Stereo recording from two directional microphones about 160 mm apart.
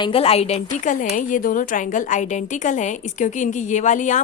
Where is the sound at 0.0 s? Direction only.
35° left (ahead or behind).